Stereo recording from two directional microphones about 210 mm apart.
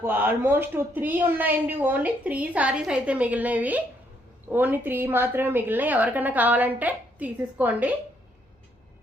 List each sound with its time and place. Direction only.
0.0 s a woman's voice: 10° right (ahead or behind)